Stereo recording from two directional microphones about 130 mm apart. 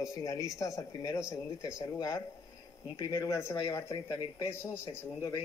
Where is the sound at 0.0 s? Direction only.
25° left (ahead or behind).